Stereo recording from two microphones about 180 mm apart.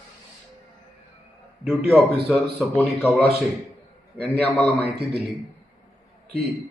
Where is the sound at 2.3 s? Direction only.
Centre (ahead or behind).